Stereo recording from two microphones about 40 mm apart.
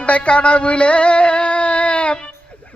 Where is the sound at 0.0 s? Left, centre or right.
Left.